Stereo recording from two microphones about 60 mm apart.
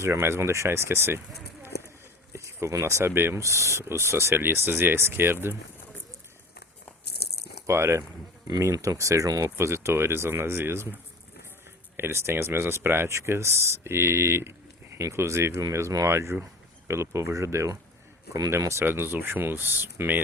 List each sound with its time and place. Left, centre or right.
0.0 s speech: right
2.3 s a sound: right
3.1 s speech: right
3.4 s speech: right
7.7 s speech: right
8.7 s speech: right
9.6 s speech: right
11.9 s speech: right
13.1 s speech: right
16.0 s speech: right
18.9 s speech: right